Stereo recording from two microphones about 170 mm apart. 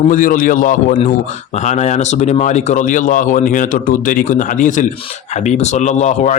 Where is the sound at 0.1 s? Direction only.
50° left (ahead or behind).